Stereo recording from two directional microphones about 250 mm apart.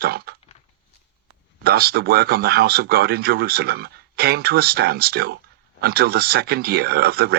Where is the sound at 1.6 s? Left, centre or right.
Right.